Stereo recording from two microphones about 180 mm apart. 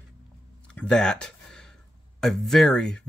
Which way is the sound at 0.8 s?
5° left (ahead or behind).